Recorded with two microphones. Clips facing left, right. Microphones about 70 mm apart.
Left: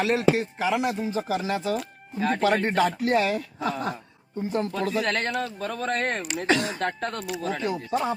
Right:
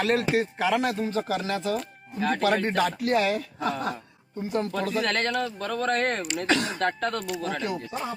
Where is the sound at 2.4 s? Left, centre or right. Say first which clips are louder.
Left 2 dB; left.